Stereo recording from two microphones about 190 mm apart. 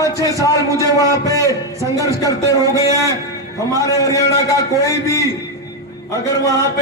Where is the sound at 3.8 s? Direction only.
15° left (ahead or behind).